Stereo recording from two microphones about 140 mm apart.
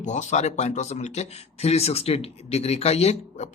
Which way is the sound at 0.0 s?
60° left (ahead or behind).